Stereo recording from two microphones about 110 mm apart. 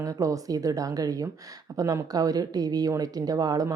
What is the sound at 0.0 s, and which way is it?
A woman's voice, 30° right (ahead or behind).